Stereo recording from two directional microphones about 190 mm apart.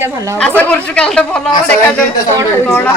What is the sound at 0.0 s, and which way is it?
Speech, 15° right (ahead or behind).